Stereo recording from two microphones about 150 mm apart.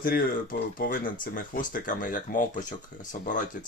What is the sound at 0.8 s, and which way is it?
Speech, 65° left (ahead or behind).